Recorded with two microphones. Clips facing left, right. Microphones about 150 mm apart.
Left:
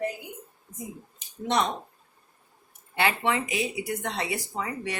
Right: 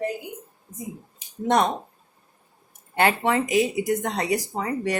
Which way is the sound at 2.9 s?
40° right (ahead or behind).